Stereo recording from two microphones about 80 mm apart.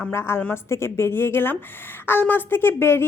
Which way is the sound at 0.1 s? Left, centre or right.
Left.